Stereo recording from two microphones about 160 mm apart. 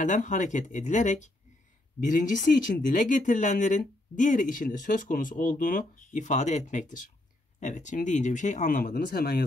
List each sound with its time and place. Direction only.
0.0 s speech: 50° left (ahead or behind); by 9.4 s 65° left (ahead or behind)